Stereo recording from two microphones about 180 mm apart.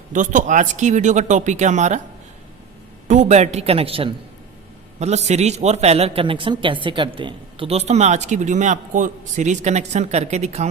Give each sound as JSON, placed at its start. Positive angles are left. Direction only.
{"t": 0.1, "sound": "speech", "side_deg": -45}
{"t": 3.1, "sound": "speech", "side_deg": -40}